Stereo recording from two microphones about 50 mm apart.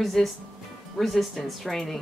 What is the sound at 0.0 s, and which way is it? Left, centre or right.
A woman's voice, centre.